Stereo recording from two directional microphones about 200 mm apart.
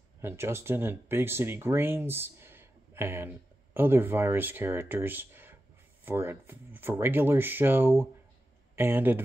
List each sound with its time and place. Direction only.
0.2 s speech: 10° right (ahead or behind)